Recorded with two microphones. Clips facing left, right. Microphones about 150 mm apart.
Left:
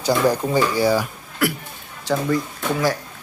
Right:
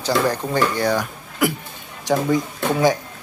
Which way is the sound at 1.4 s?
20° right (ahead or behind).